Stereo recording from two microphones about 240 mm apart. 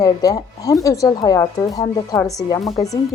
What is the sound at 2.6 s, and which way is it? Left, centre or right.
Speech, centre.